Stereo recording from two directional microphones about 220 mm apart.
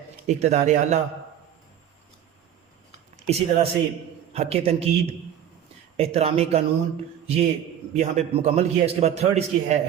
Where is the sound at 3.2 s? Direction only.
30° right (ahead or behind).